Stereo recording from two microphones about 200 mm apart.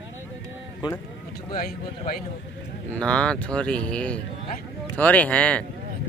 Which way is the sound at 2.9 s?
5° left (ahead or behind).